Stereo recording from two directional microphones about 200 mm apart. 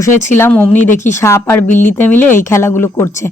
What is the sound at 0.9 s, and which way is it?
Speech, 35° left (ahead or behind).